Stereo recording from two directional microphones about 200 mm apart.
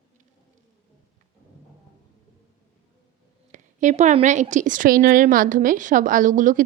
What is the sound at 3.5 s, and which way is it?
A woman's voice, 35° right (ahead or behind).